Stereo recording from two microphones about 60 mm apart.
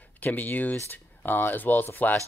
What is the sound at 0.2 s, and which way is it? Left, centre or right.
Speech, left.